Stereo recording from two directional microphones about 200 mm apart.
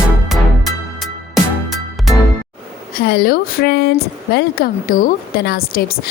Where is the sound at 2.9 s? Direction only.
50° left (ahead or behind).